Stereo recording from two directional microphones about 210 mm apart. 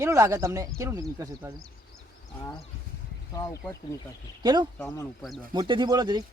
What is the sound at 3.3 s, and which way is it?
Speech, 15° left (ahead or behind).